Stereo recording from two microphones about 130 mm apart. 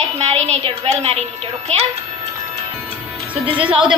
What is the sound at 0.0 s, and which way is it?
A woman's voice, 55° right (ahead or behind).